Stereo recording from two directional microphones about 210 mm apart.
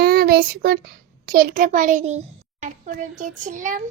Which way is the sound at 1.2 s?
45° right (ahead or behind).